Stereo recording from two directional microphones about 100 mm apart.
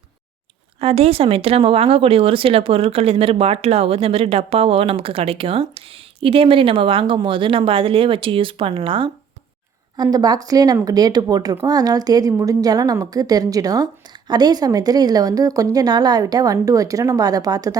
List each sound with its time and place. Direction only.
0.8 s speech: 90° right; by 9.1 s 60° right (ahead or behind)
10.0 s a woman's voice: 40° right (ahead or behind)